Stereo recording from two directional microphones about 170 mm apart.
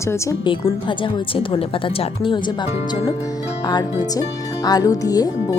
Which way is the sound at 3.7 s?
25° left (ahead or behind).